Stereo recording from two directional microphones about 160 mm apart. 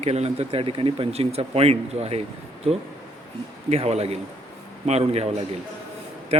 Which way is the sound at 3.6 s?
40° right (ahead or behind).